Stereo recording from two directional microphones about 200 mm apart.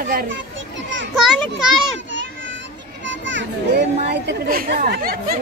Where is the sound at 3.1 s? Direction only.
65° right (ahead or behind).